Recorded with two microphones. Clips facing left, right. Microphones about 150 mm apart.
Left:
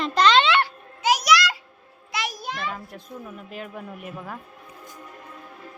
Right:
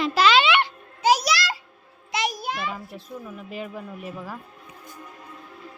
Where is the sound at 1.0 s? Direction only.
30° right (ahead or behind).